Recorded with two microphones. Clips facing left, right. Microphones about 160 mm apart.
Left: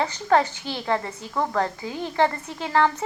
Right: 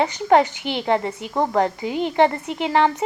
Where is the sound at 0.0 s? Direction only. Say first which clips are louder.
Right 4 dB; 20° right (ahead or behind).